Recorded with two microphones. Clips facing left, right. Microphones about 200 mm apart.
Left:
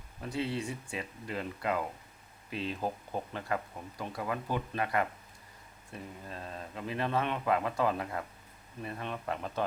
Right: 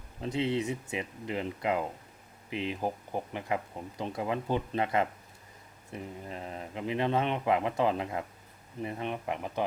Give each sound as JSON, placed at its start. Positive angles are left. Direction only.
{"t": 0.2, "sound": "speech", "side_deg": -20}